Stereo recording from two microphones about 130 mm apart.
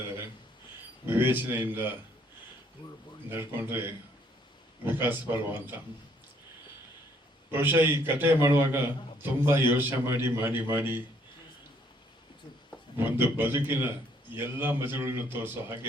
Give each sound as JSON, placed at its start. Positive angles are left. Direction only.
{"t": 1.0, "sound": "a man's voice", "side_deg": -15}
{"t": 3.2, "sound": "a man's voice", "side_deg": -15}
{"t": 7.5, "sound": "a man's voice", "side_deg": -15}
{"t": 13.0, "sound": "a man's voice", "side_deg": -15}